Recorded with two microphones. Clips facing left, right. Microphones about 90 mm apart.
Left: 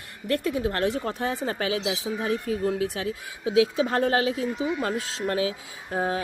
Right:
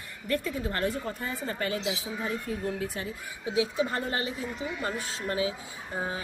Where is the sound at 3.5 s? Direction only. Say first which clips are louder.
Left 6 dB; 90° left.